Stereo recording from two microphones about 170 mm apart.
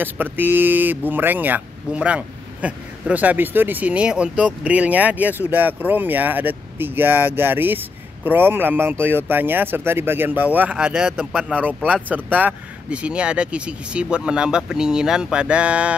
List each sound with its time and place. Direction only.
0.0 s speech: 10° right (ahead or behind)